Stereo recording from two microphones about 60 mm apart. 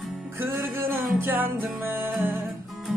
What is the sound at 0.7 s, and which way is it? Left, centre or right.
Music, right.